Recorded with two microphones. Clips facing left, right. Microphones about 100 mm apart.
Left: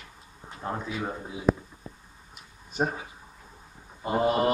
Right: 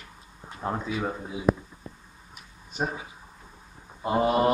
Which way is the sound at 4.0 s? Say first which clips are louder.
Right 1 dB; 10° right (ahead or behind).